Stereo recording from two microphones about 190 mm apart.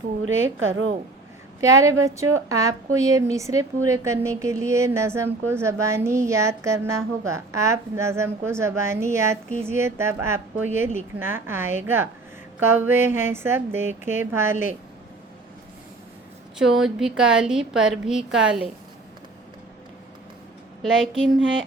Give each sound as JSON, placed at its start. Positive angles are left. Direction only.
{"t": 0.6, "sound": "a woman's voice", "side_deg": -85}
{"t": 1.6, "sound": "a woman's voice", "side_deg": -15}
{"t": 16.6, "sound": "a woman's voice", "side_deg": 0}